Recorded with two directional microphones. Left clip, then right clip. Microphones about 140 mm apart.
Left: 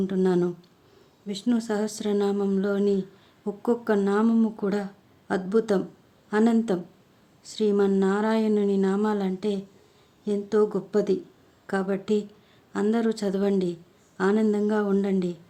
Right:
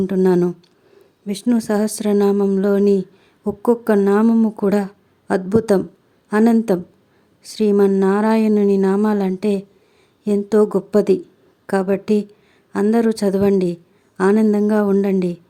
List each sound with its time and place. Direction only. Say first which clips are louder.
0.0 s speech: right 8 dB; 40° right (ahead or behind)